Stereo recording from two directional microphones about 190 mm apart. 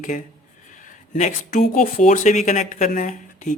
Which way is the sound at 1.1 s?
40° left (ahead or behind).